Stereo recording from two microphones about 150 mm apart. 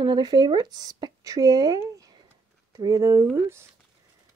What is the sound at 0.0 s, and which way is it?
Speech, 30° right (ahead or behind).